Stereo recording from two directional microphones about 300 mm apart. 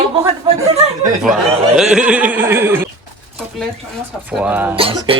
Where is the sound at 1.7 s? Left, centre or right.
Centre.